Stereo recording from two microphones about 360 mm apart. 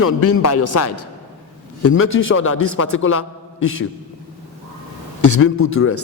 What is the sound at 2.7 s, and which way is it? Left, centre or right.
Speech, left.